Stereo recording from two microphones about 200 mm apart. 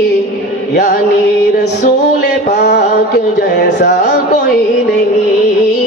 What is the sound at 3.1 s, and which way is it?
Speech, 60° left (ahead or behind).